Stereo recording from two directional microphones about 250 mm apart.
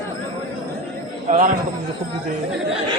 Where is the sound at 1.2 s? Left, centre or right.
Right.